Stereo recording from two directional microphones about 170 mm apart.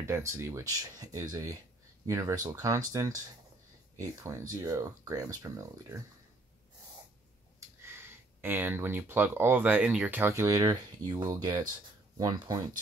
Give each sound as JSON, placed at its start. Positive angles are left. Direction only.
{"t": 0.0, "sound": "speech", "side_deg": -15}
{"t": 8.4, "sound": "speech", "side_deg": -10}